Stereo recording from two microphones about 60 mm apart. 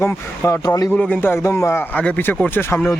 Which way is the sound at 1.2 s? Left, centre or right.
Left.